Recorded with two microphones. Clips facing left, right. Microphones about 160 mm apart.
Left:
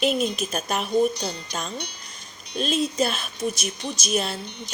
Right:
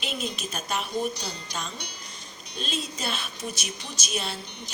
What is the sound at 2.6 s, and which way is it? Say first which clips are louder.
A woman's voice: left 10 dB; 45° left (ahead or behind).